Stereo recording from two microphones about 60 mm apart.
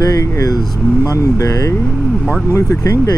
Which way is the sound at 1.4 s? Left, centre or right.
Left.